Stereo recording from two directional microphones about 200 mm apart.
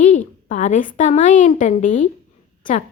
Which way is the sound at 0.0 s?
35° left (ahead or behind).